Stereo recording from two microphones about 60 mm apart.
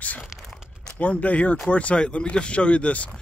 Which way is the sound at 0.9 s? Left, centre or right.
Left.